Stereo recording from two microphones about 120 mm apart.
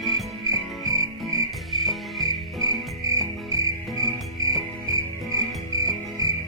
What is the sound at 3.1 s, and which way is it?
Cricket, 30° right (ahead or behind).